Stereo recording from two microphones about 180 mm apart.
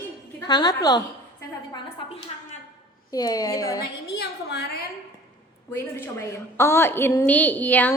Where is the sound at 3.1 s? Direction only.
20° left (ahead or behind).